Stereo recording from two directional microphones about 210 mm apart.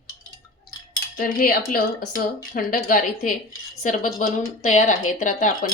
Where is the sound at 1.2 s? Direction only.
45° left (ahead or behind).